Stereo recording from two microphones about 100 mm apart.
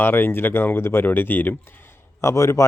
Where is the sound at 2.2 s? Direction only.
30° left (ahead or behind).